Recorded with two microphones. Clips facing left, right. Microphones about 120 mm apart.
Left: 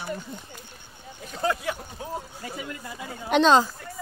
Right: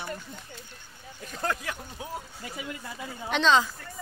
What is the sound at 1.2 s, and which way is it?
Speech, 5° left (ahead or behind).